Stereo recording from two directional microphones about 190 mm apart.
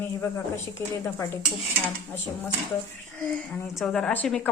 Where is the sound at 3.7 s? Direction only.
5° left (ahead or behind).